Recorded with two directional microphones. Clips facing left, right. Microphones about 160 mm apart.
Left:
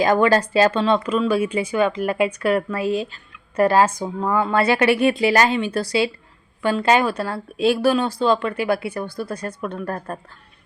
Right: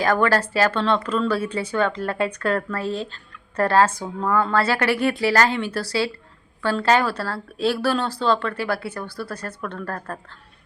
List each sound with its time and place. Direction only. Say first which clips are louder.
0.0 s speech: left 3 dB; 15° left (ahead or behind)